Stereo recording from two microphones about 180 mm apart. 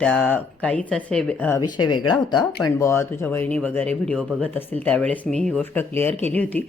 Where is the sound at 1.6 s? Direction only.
25° left (ahead or behind).